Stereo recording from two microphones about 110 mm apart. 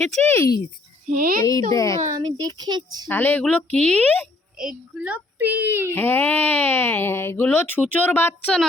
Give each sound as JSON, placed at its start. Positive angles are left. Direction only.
{"t": 0.0, "sound": "speech", "side_deg": -90}
{"t": 0.3, "sound": "a woman's voice", "side_deg": 25}
{"t": 2.1, "sound": "speech", "side_deg": -40}
{"t": 3.1, "sound": "speech", "side_deg": 15}
{"t": 4.6, "sound": "a child's voice", "side_deg": -10}
{"t": 5.9, "sound": "speech", "side_deg": 20}